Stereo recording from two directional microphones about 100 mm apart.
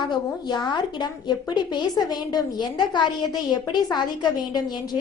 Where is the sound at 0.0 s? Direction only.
50° left (ahead or behind).